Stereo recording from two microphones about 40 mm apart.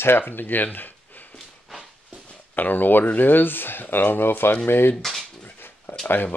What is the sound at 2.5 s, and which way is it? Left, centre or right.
Speech, left.